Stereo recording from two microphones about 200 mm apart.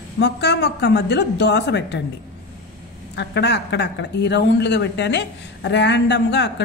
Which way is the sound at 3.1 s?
60° left (ahead or behind).